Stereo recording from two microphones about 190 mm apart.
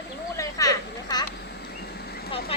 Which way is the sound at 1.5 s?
60° left (ahead or behind).